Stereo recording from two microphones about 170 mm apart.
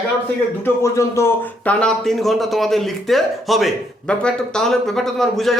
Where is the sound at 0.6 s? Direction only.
15° left (ahead or behind).